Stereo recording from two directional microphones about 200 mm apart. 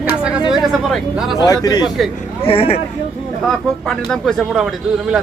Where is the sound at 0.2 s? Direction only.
5° right (ahead or behind).